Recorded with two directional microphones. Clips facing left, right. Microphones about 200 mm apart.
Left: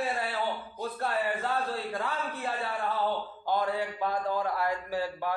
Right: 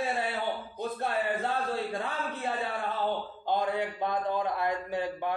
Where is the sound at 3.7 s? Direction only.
20° right (ahead or behind).